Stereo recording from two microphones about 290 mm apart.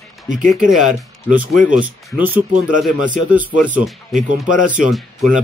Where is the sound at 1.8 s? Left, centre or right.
Centre.